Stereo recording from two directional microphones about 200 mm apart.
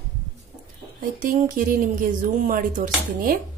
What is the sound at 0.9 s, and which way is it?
Speech, 45° right (ahead or behind).